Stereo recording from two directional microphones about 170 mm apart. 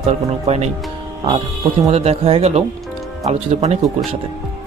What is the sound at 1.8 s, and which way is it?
Speech, 35° right (ahead or behind).